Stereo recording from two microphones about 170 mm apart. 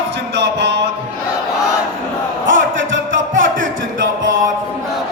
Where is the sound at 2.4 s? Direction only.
90° right.